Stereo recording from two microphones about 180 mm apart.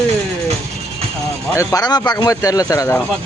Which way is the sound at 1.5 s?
20° left (ahead or behind).